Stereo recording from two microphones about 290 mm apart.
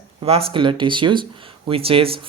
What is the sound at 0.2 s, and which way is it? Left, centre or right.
Speech, centre.